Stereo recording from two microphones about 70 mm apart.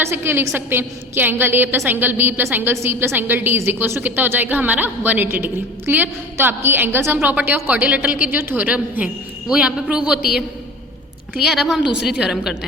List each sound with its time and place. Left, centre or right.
0.0 s a woman's voice: right; by 10.2 s centre
11.3 s a woman's voice: centre